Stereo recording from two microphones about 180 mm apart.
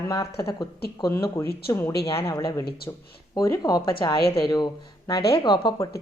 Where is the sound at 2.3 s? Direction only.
20° left (ahead or behind).